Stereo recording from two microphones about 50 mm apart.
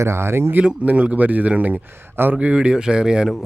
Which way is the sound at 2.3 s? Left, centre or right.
Right.